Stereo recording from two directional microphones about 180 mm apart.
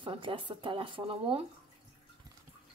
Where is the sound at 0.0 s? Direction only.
25° right (ahead or behind).